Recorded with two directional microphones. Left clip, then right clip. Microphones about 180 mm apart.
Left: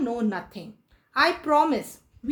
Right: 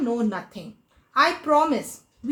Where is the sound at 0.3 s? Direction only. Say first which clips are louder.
Right 1 dB; 45° left (ahead or behind).